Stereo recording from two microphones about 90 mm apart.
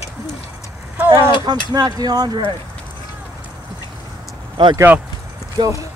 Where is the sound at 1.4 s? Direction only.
50° right (ahead or behind).